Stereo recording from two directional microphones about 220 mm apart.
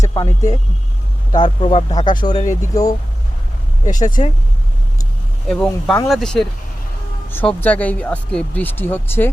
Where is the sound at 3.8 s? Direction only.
35° left (ahead or behind).